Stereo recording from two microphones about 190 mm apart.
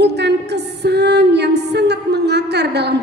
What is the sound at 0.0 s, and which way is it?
Music, 60° right (ahead or behind).